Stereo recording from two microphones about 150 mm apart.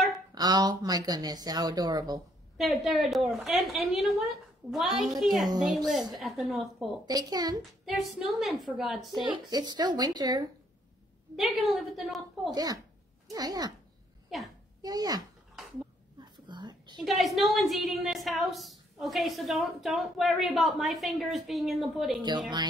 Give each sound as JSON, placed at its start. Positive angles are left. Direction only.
{"t": 0.3, "sound": "speech", "side_deg": -25}
{"t": 2.5, "sound": "a woman's voice", "side_deg": 0}
{"t": 7.1, "sound": "speech", "side_deg": -25}
{"t": 7.8, "sound": "a woman's voice", "side_deg": 0}
{"t": 9.2, "sound": "speech", "side_deg": -30}
{"t": 11.3, "sound": "a woman's voice", "side_deg": 0}
{"t": 12.4, "sound": "speech", "side_deg": -25}
{"t": 14.8, "sound": "speech", "side_deg": -25}
{"t": 16.2, "sound": "whispering", "side_deg": -30}
{"t": 17.0, "sound": "a woman's voice", "side_deg": 0}